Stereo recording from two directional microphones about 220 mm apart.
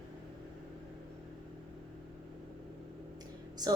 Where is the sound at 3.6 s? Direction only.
20° right (ahead or behind).